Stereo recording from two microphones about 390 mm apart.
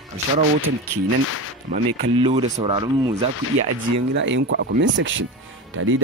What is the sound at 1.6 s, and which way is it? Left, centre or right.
Speech, centre.